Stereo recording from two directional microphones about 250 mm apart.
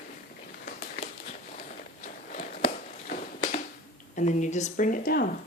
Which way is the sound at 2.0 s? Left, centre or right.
Left.